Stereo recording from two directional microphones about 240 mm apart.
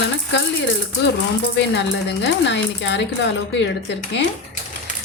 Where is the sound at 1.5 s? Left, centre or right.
Left.